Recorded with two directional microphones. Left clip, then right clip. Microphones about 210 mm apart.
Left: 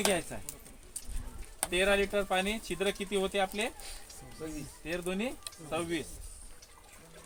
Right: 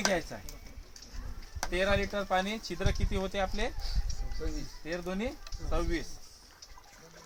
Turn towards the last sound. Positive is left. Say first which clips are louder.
# even
turn(degrees=-15)  # may be behind; listen again after turning